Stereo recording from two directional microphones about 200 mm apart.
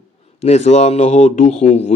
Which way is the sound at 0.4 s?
35° left (ahead or behind).